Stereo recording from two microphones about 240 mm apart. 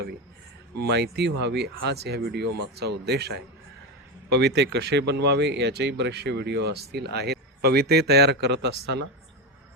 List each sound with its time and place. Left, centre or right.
0.8 s speech: right